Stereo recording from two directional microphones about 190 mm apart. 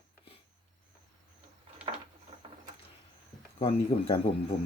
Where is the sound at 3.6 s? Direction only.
30° left (ahead or behind).